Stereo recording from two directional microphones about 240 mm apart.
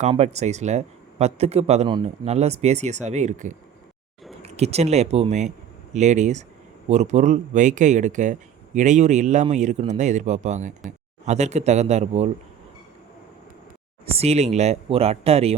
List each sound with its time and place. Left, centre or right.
0.0 s speech: right
14.2 s speech: right